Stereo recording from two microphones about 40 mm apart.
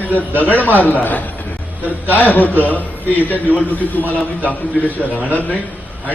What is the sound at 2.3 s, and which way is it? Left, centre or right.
Speech, left.